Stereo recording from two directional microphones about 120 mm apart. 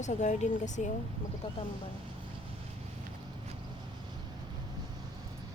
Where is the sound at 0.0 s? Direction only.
90° left.